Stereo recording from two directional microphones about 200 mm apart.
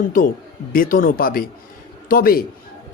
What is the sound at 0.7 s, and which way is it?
A woman's voice, 45° left (ahead or behind).